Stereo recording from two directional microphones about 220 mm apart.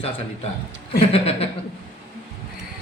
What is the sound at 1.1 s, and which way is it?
Speech, 25° left (ahead or behind).